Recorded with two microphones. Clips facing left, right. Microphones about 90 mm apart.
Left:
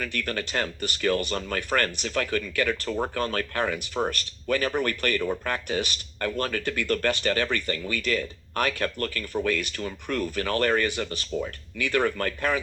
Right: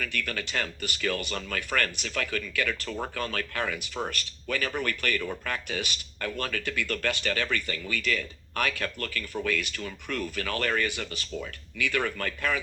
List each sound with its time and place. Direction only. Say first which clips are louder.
0.0 s speech: left 3 dB; 40° left (ahead or behind)